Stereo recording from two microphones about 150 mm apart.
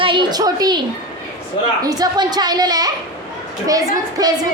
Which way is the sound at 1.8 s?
25° right (ahead or behind).